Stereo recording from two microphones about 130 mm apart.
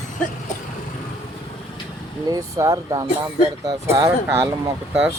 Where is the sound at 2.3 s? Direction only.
25° right (ahead or behind).